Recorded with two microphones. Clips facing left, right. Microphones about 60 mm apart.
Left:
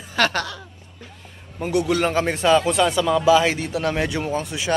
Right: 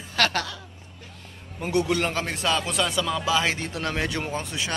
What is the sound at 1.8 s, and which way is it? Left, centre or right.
Speech, centre.